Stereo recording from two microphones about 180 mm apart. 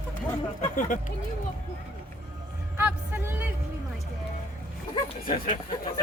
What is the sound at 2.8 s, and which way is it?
Music, 10° right (ahead or behind).